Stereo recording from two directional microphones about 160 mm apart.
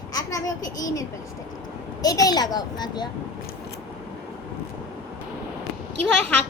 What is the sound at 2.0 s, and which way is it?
A child's voice, 25° left (ahead or behind).